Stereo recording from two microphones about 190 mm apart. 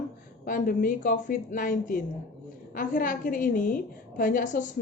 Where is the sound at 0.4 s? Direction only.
50° left (ahead or behind).